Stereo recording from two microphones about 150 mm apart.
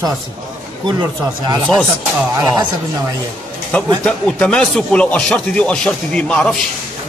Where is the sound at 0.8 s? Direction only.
30° right (ahead or behind).